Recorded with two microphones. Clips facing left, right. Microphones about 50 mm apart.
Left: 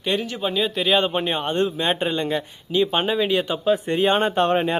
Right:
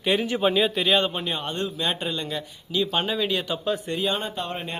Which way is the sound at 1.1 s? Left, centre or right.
Left.